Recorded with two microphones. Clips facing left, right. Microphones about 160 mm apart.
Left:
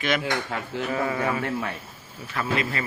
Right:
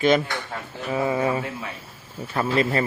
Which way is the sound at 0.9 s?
20° right (ahead or behind).